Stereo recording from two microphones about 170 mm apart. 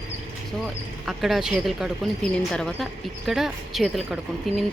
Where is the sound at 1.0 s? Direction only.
Centre (ahead or behind).